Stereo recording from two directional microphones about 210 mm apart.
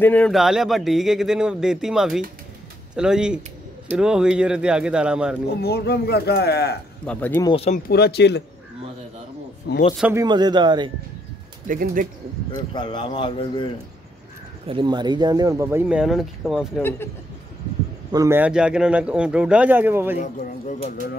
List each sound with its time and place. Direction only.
0.0 s speech: 5° left (ahead or behind)
5.6 s speech: 50° left (ahead or behind)
7.1 s speech: 10° left (ahead or behind)
7.5 s a man's voice: 30° left (ahead or behind)
7.9 s speech: 50° left (ahead or behind)
9.9 s speech: 10° right (ahead or behind)
10.2 s speech: 20° right (ahead or behind)
11.6 s speech: 40° right (ahead or behind)
12.5 s a man's voice: 20° left (ahead or behind)
14.7 s speech: 20° right (ahead or behind); by 16.8 s centre (ahead or behind)
18.1 s speech: 15° right (ahead or behind)
20.2 s speech: 35° left (ahead or behind)